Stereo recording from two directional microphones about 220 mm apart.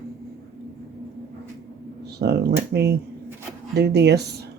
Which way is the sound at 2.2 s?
50° right (ahead or behind).